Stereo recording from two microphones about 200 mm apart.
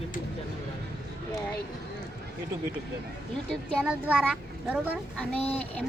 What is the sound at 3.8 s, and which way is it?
A child's voice, 5° right (ahead or behind).